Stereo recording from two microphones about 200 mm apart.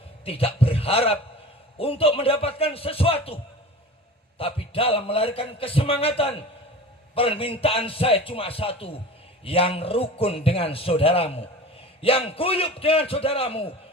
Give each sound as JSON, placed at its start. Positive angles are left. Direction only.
{"t": 0.3, "sound": "a man's voice", "side_deg": 30}
{"t": 4.4, "sound": "a man's voice", "side_deg": 30}